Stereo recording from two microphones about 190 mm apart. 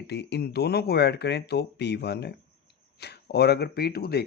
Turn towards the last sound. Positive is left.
turn(degrees=55)  # may be behind; listen again after turning